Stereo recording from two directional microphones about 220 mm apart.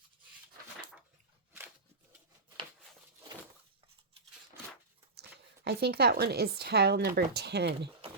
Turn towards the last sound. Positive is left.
turn(degrees=-50)  # may be behind; listen again after turning